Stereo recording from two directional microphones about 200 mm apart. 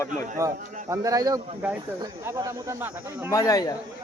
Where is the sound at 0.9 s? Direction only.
15° right (ahead or behind).